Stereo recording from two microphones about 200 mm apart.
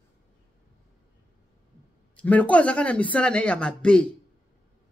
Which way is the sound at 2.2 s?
5° left (ahead or behind).